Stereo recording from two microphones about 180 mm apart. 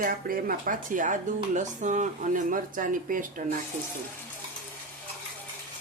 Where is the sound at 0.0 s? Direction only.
50° right (ahead or behind).